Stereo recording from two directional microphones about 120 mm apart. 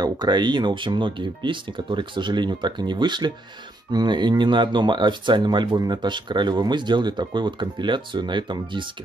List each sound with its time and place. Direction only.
0.0 s speech: 35° right (ahead or behind)